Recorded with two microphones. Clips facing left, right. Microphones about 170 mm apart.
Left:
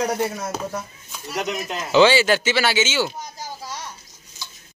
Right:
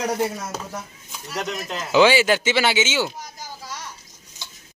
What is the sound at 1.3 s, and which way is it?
Speech, 15° left (ahead or behind).